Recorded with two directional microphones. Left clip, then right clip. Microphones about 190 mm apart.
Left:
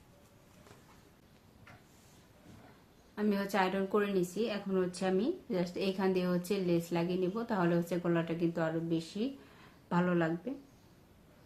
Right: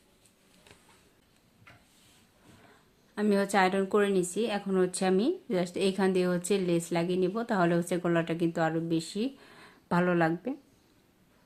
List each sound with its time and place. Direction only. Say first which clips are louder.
3.2 s a woman's voice: right 6 dB; 45° right (ahead or behind)